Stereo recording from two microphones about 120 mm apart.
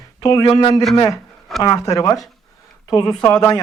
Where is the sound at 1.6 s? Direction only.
30° left (ahead or behind).